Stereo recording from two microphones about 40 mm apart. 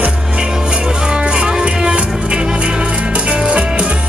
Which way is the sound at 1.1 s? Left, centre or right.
Right.